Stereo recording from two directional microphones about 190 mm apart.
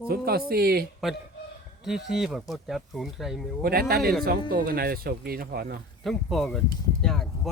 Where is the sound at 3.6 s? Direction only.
50° right (ahead or behind).